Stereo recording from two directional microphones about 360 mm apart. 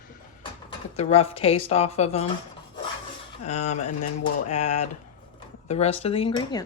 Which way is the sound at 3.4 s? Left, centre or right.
Centre.